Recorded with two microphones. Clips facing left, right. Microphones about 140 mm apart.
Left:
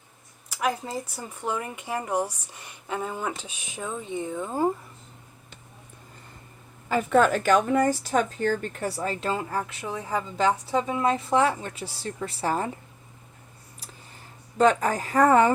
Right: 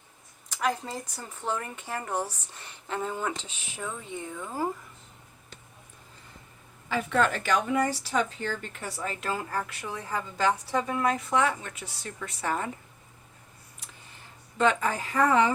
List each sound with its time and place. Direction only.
0.5 s speech: 10° left (ahead or behind); by 4.7 s 25° left (ahead or behind)
6.8 s a woman's voice: 45° left (ahead or behind); by 12.7 s 30° left (ahead or behind)
14.6 s speech: 40° left (ahead or behind)